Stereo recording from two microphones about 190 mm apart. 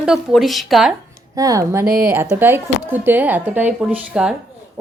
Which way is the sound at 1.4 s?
15° right (ahead or behind).